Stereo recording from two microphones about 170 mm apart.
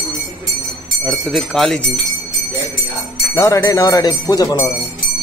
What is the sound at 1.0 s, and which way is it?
Jingle bell, 5° left (ahead or behind).